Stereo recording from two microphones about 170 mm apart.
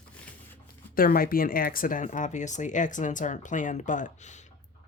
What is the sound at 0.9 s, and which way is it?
Speech, 60° left (ahead or behind).